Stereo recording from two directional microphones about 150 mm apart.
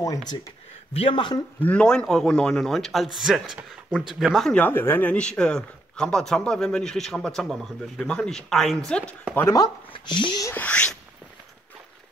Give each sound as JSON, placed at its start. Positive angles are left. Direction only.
{"t": 0.0, "sound": "speech", "side_deg": 25}
{"t": 0.9, "sound": "speech", "side_deg": 35}
{"t": 1.6, "sound": "speech", "side_deg": 10}
{"t": 9.3, "sound": "a sound", "side_deg": 15}
{"t": 9.6, "sound": "speech", "side_deg": 30}
{"t": 10.5, "sound": "a sound", "side_deg": 10}